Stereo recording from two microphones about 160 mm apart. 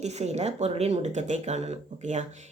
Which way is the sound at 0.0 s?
45° right (ahead or behind).